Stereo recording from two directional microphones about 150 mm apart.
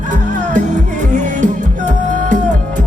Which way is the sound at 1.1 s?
55° right (ahead or behind).